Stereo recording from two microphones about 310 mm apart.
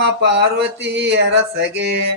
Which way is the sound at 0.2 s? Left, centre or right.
Right.